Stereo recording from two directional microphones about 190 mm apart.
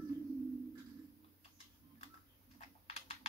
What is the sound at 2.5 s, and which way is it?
Typing, 35° left (ahead or behind).